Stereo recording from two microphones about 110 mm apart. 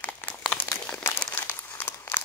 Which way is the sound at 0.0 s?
15° left (ahead or behind).